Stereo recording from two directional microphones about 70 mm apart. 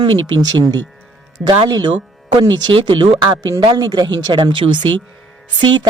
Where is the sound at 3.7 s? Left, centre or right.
Right.